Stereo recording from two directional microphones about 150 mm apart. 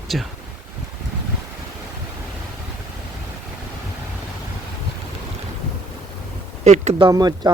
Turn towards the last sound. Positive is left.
turn(degrees=-25)  # may be behind; listen again after turning